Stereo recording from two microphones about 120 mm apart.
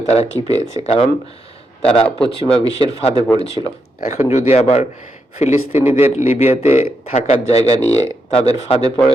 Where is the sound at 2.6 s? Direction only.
55° left (ahead or behind).